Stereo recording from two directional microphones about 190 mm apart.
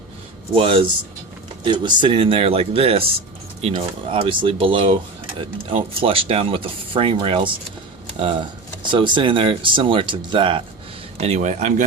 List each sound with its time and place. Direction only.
0.5 s speech: 30° right (ahead or behind)